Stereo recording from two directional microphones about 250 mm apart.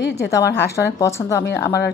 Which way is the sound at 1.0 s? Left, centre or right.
Centre.